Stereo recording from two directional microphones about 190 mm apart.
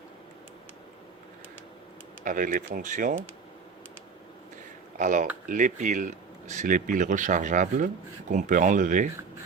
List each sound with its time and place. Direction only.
2.2 s speech: 45° right (ahead or behind)
4.9 s speech: 40° right (ahead or behind)